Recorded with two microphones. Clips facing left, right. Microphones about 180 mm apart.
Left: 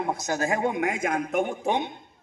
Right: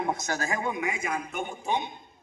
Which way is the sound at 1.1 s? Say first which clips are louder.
Left 5 dB; 55° left (ahead or behind).